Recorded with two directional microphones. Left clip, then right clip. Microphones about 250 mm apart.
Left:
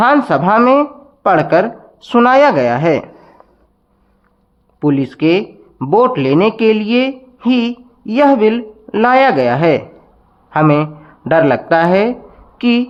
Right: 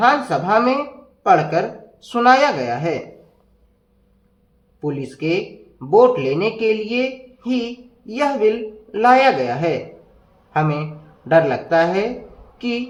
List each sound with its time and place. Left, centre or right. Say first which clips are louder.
0.0 s a man's voice: left 5 dB; left
4.8 s a man's voice: left 10 dB; left